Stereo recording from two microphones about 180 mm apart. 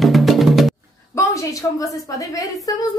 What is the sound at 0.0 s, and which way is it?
Music, centre (ahead or behind).